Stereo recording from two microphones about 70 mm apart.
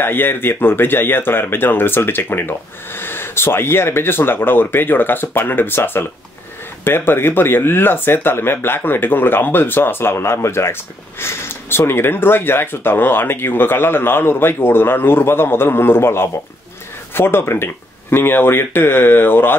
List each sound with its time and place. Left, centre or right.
0.0 s speech: left